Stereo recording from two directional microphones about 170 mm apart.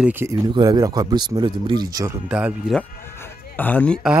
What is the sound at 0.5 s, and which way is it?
Speech, 20° right (ahead or behind).